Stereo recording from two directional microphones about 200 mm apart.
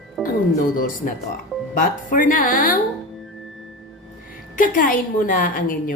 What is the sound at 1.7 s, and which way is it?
A woman's voice, 40° left (ahead or behind).